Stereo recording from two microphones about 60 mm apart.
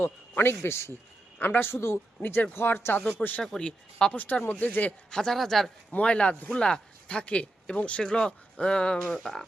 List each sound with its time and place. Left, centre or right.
0.0 s a man's voice: left
2.2 s speech: left
3.2 s a man's voice: centre
4.1 s a man's voice: left
5.1 s speech: centre
5.9 s speech: centre